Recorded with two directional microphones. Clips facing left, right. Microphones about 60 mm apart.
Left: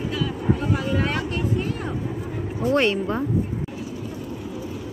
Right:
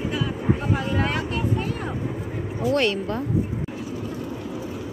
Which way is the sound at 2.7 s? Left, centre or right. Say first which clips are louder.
Left 2 dB; left.